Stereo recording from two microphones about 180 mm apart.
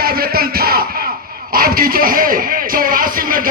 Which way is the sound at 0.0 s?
55° right (ahead or behind).